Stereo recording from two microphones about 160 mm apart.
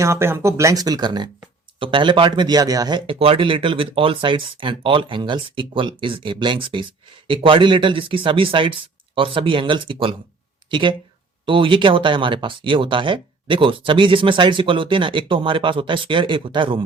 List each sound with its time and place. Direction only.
0.0 s speech: 15° right (ahead or behind)